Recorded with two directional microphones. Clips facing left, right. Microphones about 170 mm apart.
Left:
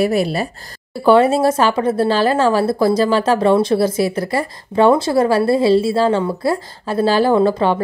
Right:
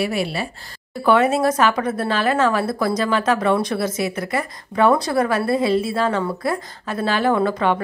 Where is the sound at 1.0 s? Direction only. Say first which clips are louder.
Left 4 dB; 30° left (ahead or behind).